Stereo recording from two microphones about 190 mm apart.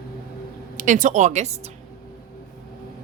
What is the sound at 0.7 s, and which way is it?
Speech, 45° right (ahead or behind).